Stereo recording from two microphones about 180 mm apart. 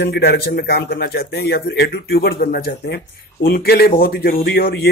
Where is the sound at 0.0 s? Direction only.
60° left (ahead or behind).